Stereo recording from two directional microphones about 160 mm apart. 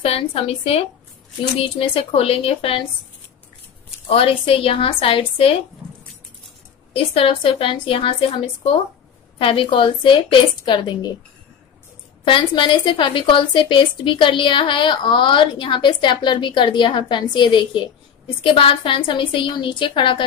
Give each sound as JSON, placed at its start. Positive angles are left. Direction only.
{"t": 0.0, "sound": "a woman's voice", "side_deg": 35}
{"t": 4.1, "sound": "a woman's voice", "side_deg": 35}
{"t": 6.9, "sound": "a woman's voice", "side_deg": 35}
{"t": 12.3, "sound": "a woman's voice", "side_deg": 30}